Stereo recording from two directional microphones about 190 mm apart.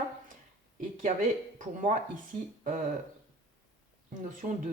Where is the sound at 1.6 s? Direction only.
40° right (ahead or behind).